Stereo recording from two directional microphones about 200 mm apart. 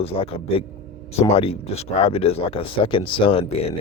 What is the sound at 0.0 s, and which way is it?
Speech, 30° left (ahead or behind).